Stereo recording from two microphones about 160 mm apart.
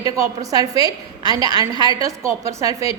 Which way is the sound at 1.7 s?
25° right (ahead or behind).